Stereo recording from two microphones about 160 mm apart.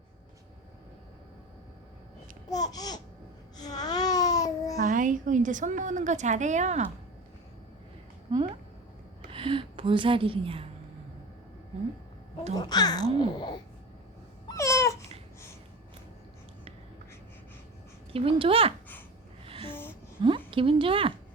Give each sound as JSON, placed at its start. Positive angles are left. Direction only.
{"t": 2.5, "sound": "a child's voice", "side_deg": 25}
{"t": 3.6, "sound": "babbling", "side_deg": 25}
{"t": 4.8, "sound": "a woman's voice", "side_deg": -55}
{"t": 8.3, "sound": "a sound", "side_deg": -35}
{"t": 9.3, "sound": "speech", "side_deg": -30}
{"t": 12.5, "sound": "a child's voice", "side_deg": 25}
{"t": 14.4, "sound": "babbling", "side_deg": 20}
{"t": 18.1, "sound": "a child's voice", "side_deg": -35}
{"t": 19.7, "sound": "music", "side_deg": 15}
{"t": 20.5, "sound": "a child's voice", "side_deg": -35}